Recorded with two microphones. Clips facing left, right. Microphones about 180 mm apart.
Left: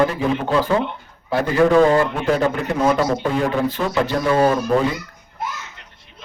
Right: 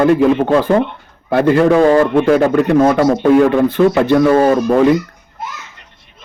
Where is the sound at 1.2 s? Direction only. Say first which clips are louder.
Right 5 dB; 60° right (ahead or behind).